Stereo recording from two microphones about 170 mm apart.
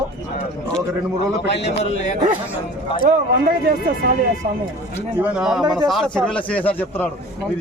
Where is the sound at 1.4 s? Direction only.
90° left.